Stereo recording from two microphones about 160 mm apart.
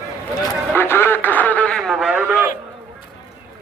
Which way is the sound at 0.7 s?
15° left (ahead or behind).